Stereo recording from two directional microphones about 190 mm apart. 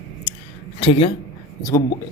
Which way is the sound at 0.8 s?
30° left (ahead or behind).